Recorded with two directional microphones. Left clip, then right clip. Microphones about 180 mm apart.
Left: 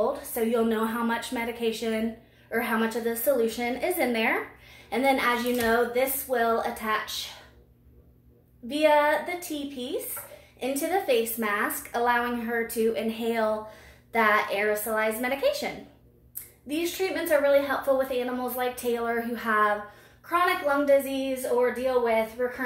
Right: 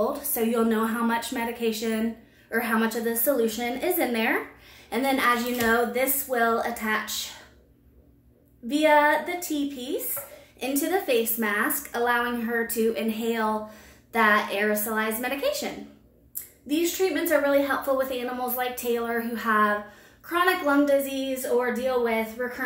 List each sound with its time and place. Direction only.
0.0 s a woman's voice: 20° right (ahead or behind)
8.6 s a woman's voice: 20° right (ahead or behind)